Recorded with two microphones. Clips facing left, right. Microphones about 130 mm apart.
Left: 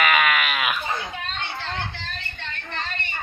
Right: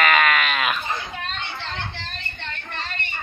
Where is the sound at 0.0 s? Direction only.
5° left (ahead or behind).